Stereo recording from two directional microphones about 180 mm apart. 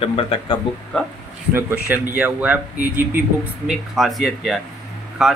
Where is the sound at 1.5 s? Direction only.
10° right (ahead or behind).